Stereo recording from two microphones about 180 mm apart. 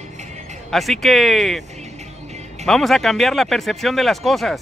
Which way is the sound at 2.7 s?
Centre (ahead or behind).